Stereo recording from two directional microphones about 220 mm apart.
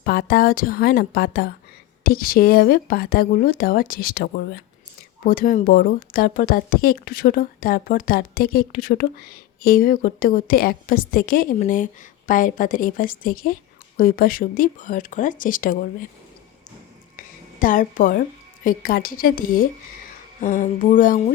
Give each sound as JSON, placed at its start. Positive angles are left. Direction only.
{"t": 0.0, "sound": "speech", "side_deg": 45}
{"t": 17.6, "sound": "speech", "side_deg": 35}